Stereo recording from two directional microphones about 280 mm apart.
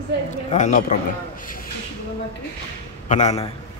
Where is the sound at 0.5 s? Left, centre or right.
Left.